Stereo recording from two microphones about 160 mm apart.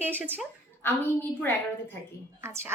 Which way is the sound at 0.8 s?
10° left (ahead or behind).